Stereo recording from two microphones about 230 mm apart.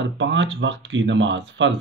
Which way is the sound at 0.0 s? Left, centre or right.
Right.